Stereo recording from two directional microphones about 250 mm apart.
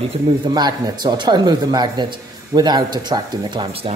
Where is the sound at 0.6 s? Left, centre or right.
Centre.